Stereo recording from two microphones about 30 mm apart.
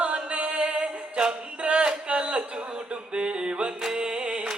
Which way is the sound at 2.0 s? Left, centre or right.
Right.